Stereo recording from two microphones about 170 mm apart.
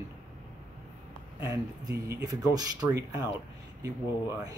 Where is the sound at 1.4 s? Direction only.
15° right (ahead or behind).